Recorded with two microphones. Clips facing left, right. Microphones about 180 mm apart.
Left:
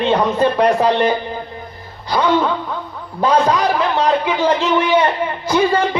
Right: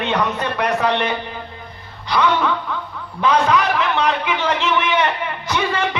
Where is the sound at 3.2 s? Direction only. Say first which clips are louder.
Left 2 dB; 35° left (ahead or behind).